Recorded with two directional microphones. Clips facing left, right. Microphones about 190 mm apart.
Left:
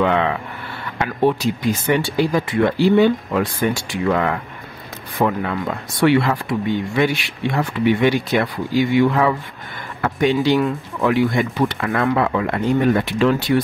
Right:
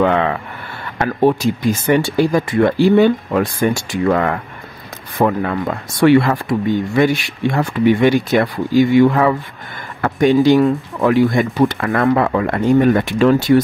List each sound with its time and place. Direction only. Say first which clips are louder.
0.0 s speech: right 3 dB; 50° right (ahead or behind)